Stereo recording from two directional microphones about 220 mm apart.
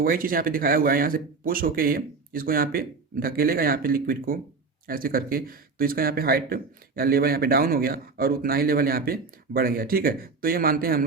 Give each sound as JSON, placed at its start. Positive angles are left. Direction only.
{"t": 0.0, "sound": "speech", "side_deg": -40}